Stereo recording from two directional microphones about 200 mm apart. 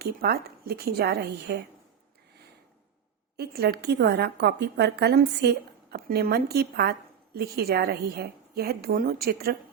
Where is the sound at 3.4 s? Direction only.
50° right (ahead or behind).